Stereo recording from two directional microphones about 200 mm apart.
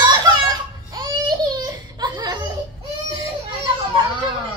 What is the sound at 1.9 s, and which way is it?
Laughter, 20° right (ahead or behind).